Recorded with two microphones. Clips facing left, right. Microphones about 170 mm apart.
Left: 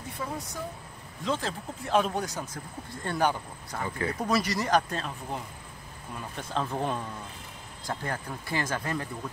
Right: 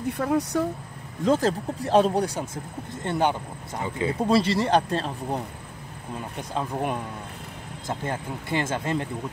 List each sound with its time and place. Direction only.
0.0 s speech: 65° right (ahead or behind)
1.2 s speech: 45° right (ahead or behind)
6.3 s speech: 15° right (ahead or behind)